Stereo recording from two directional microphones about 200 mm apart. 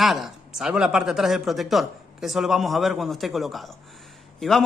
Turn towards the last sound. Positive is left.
turn(degrees=0)  # may be behind; listen again after turning